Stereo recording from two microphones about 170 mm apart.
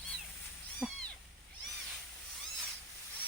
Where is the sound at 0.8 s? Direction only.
Centre (ahead or behind).